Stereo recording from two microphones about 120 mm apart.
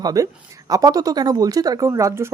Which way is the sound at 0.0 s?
30° right (ahead or behind).